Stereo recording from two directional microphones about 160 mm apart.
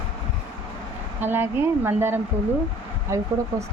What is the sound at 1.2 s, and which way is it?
Speech, 15° right (ahead or behind).